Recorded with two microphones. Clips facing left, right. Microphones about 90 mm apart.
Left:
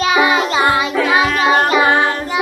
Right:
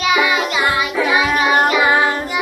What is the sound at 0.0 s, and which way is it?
Music, 35° left (ahead or behind).